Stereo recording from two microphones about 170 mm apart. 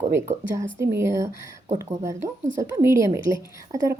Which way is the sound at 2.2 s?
45° right (ahead or behind).